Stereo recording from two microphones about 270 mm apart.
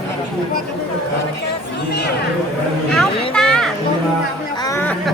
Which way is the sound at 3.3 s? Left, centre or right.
Centre.